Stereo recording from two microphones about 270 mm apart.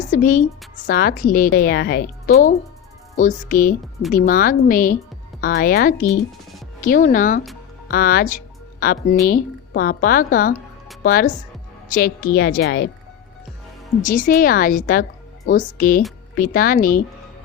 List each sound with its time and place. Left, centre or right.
0.0 s a woman's voice: left
14.0 s a woman's voice: left